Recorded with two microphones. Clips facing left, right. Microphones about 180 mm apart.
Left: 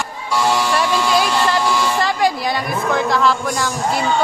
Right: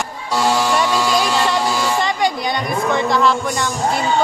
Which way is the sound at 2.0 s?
Centre (ahead or behind).